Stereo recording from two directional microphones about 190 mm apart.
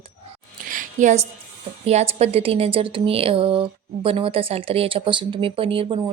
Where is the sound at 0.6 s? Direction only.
45° right (ahead or behind).